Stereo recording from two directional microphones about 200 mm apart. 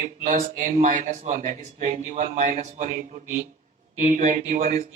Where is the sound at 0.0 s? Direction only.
35° right (ahead or behind).